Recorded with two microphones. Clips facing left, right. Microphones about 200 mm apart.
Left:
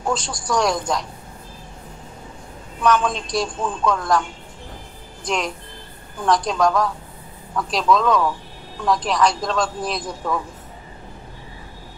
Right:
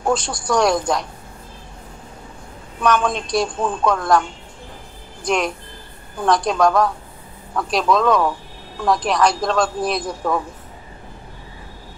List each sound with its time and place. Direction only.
0.1 s speech: 65° right (ahead or behind)
2.8 s speech: 60° right (ahead or behind)
5.2 s speech: 60° right (ahead or behind)